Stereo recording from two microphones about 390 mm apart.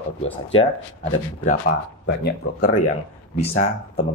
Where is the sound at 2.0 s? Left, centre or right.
Left.